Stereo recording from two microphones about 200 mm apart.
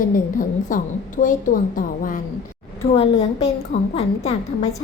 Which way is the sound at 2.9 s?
30° left (ahead or behind).